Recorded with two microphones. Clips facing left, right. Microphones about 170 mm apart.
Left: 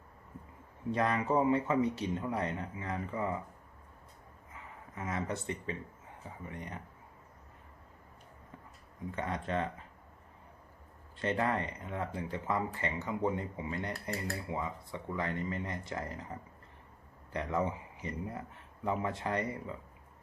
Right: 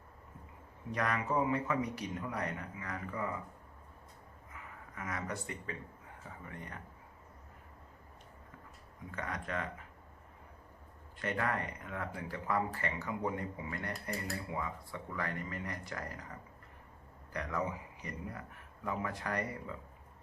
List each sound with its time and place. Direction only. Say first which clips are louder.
0.9 s speech: left 4 dB; 25° left (ahead or behind)
4.5 s speech: left 2 dB; 25° left (ahead or behind)
9.1 s speech: left 4 dB; 25° left (ahead or behind)
11.2 s speech: left 4 dB; 25° left (ahead or behind)
17.3 s speech: left 4 dB; 25° left (ahead or behind)